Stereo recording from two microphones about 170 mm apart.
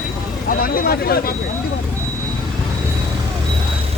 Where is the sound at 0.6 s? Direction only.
60° left (ahead or behind).